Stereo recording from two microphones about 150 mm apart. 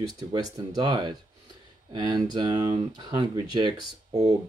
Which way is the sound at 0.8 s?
30° right (ahead or behind).